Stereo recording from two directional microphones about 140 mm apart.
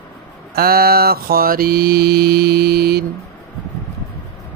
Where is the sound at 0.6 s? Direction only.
90° right.